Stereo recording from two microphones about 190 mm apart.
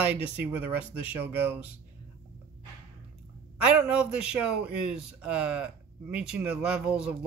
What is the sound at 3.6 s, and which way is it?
A man's voice, 5° right (ahead or behind).